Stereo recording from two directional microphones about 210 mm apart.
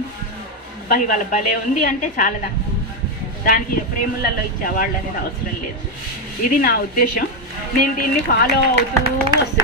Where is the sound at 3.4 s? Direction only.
40° left (ahead or behind).